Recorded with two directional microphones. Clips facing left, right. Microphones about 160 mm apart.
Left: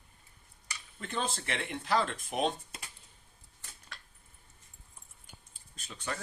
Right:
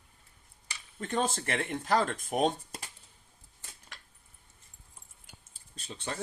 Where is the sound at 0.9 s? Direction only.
45° right (ahead or behind).